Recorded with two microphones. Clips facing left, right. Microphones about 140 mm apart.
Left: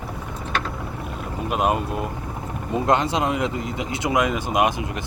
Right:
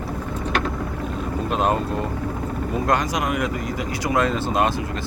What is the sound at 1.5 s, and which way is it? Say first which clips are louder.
Speech: even; 10° left (ahead or behind).